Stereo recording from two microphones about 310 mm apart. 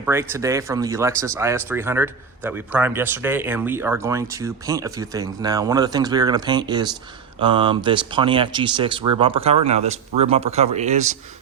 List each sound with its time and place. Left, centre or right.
0.0 s speech: centre